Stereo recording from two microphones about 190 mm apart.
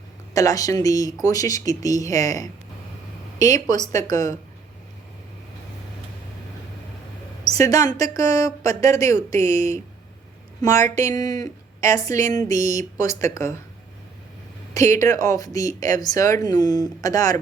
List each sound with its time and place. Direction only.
0.3 s speech: 20° left (ahead or behind)
7.4 s a sound: 20° left (ahead or behind)
7.9 s a woman's voice: 20° left (ahead or behind)
12.5 s speech: 40° right (ahead or behind)
13.0 s speech: 15° left (ahead or behind)
14.8 s speech: 15° left (ahead or behind)